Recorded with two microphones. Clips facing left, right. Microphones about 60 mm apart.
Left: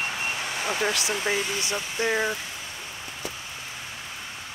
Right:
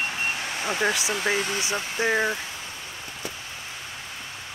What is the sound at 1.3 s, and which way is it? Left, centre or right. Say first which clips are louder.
Speech: right 1 dB; right.